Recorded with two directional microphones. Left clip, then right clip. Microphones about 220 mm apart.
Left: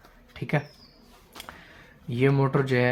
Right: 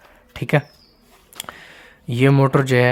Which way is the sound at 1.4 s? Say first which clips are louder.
Right 9 dB; 45° right (ahead or behind).